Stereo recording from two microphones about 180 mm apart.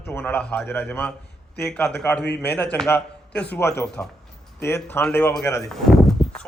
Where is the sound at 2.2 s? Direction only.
70° left (ahead or behind).